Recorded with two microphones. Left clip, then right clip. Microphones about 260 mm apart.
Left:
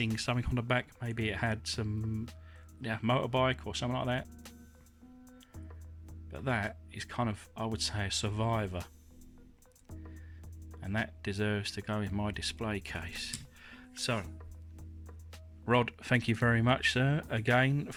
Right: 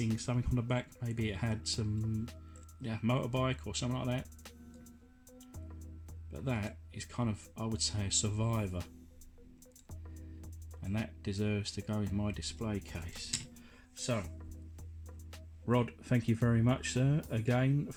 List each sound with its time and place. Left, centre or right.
0.2 s speech: left
2.0 s music: centre
2.8 s speech: left
6.9 s speech: left
10.8 s speech: left
15.6 s speech: left
16.3 s speech: left